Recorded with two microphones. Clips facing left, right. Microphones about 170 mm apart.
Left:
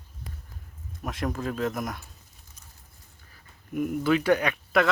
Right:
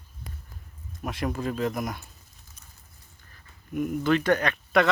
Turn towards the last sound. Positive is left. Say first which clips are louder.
# right 1 dB
turn(degrees=5)  # may be behind; listen again after turning